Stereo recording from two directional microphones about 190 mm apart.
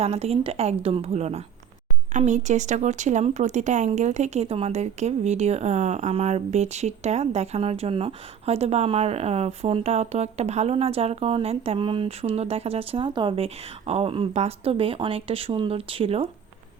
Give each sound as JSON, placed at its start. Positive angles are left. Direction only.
{"t": 0.0, "sound": "speech", "side_deg": -30}